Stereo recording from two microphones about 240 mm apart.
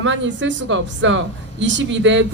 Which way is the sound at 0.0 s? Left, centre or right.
Right.